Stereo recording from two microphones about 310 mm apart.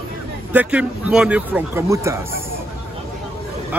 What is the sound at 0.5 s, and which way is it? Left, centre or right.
A man's voice, centre.